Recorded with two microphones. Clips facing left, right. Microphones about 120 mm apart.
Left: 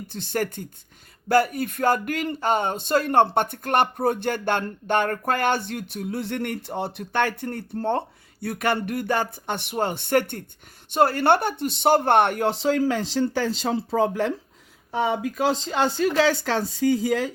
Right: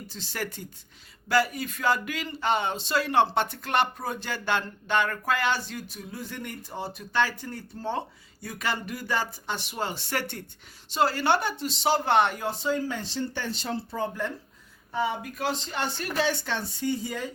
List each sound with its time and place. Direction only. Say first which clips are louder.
0.1 s speech: left 9 dB; 55° left (ahead or behind); by 17.3 s 90° left